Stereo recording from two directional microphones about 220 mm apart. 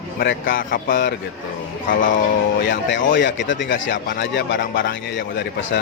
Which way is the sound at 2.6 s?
55° left (ahead or behind).